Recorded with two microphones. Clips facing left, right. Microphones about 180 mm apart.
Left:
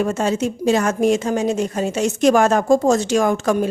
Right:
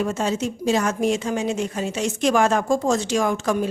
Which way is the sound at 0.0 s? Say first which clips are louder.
Left 4 dB; 50° left (ahead or behind).